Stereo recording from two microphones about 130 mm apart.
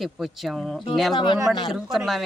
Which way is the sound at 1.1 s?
40° left (ahead or behind).